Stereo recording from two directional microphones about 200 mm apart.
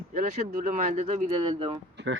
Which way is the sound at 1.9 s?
65° right (ahead or behind).